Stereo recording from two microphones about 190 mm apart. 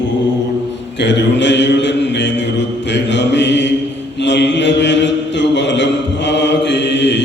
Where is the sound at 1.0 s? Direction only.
70° left (ahead or behind).